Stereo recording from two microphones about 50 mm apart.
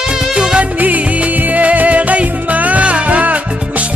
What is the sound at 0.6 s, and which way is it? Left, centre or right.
Music, right.